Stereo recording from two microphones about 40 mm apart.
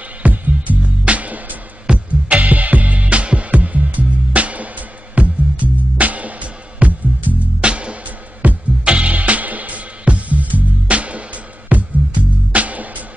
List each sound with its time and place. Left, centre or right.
0.2 s music: right
1.9 s music: right
2.2 s music: right
7.6 s music: right
9.1 s music: right